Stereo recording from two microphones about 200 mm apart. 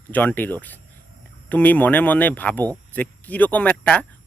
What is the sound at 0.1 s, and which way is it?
Speech, 10° left (ahead or behind).